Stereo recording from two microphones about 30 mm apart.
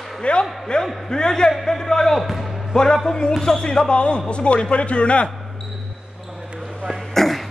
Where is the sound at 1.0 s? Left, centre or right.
Left.